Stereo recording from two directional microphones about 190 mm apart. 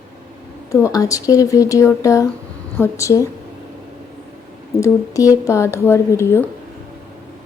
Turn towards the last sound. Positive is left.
turn(degrees=10)  # may be behind; listen again after turning